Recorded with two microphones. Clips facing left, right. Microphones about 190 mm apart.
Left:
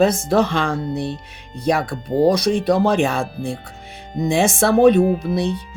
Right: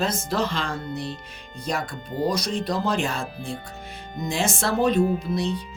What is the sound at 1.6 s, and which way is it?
Speech, 65° left (ahead or behind).